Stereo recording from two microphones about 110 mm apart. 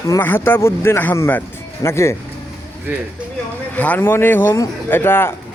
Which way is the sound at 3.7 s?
15° left (ahead or behind).